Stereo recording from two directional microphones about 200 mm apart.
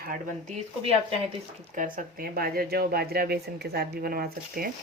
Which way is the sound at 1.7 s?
45° right (ahead or behind).